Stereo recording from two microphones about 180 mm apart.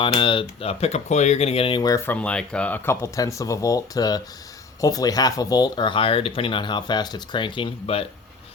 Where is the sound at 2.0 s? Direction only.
5° left (ahead or behind).